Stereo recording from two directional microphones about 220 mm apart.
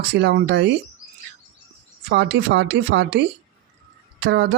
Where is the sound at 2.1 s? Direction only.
50° right (ahead or behind).